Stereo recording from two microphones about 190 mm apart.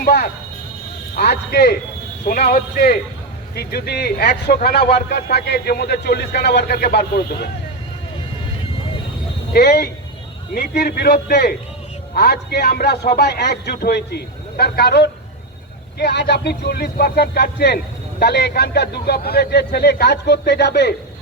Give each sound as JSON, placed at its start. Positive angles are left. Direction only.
{"t": 0.0, "sound": "a man's voice", "side_deg": 55}
{"t": 9.5, "sound": "a man's voice", "side_deg": 55}